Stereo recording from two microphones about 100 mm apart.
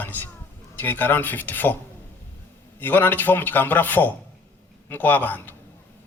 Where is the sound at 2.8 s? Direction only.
20° left (ahead or behind).